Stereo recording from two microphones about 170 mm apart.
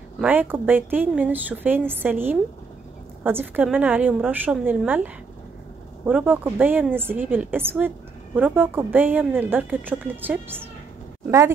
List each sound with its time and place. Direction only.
0.2 s speech: 10° right (ahead or behind)